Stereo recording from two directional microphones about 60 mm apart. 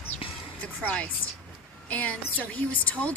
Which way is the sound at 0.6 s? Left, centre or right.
Left.